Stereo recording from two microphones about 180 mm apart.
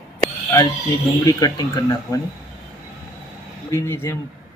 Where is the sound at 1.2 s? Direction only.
20° left (ahead or behind).